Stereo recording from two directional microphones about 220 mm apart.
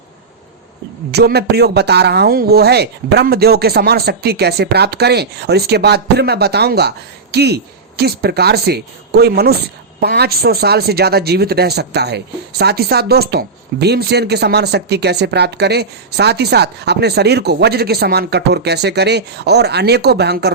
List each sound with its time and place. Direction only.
1.1 s speech: 45° right (ahead or behind)